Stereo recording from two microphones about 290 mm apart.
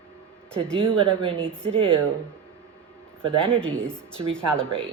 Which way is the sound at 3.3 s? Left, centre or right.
Centre.